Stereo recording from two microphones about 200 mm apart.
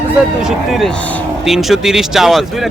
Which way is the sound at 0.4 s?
Centre (ahead or behind).